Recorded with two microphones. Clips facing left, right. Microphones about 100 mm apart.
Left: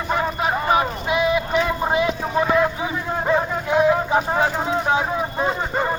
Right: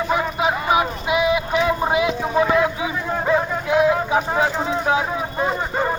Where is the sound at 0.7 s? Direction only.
10° right (ahead or behind).